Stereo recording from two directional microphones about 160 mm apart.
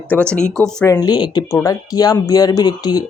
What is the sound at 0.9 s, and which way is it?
Speech, 25° left (ahead or behind).